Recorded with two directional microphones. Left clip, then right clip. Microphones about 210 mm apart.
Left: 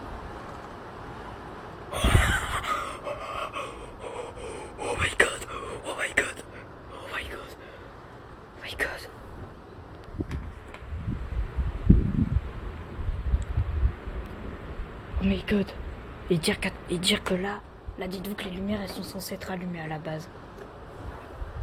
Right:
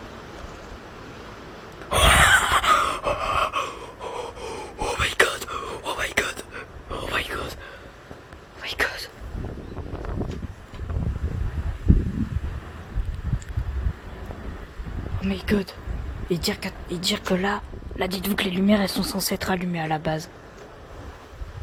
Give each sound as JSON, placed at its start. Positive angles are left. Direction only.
{"t": 1.9, "sound": "gasp", "side_deg": -45}
{"t": 8.6, "sound": "whispering", "side_deg": -25}
{"t": 15.2, "sound": "a sound", "side_deg": -25}
{"t": 16.3, "sound": "speech", "side_deg": -10}
{"t": 17.2, "sound": "speech", "side_deg": -25}
{"t": 18.0, "sound": "speech", "side_deg": -40}